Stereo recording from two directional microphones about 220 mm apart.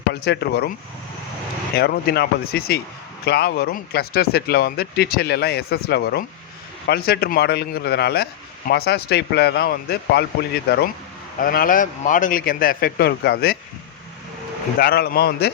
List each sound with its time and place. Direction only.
0.1 s a man's voice: 50° left (ahead or behind)
1.7 s a man's voice: 45° left (ahead or behind)
14.8 s a man's voice: 45° left (ahead or behind)